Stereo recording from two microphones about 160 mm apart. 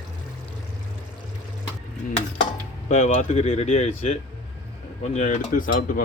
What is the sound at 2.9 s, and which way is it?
Speech, 45° left (ahead or behind).